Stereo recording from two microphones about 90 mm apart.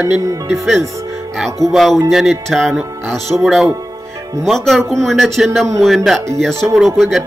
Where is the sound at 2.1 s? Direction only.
5° right (ahead or behind).